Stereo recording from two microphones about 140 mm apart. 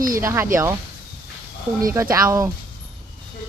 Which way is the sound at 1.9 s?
20° right (ahead or behind).